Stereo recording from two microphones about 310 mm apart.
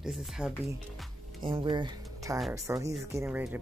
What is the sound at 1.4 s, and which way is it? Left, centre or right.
Speech, centre.